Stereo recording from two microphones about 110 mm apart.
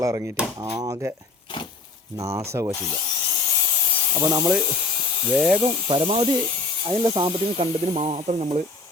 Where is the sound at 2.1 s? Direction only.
25° right (ahead or behind).